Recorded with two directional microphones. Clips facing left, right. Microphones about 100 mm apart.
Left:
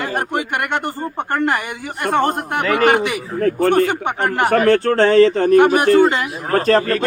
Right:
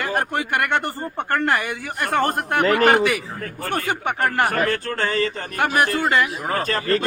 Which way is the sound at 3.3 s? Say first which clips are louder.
Left 14 dB; 40° left (ahead or behind).